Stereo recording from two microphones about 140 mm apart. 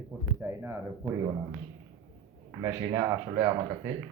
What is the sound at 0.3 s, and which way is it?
Speech, 15° right (ahead or behind).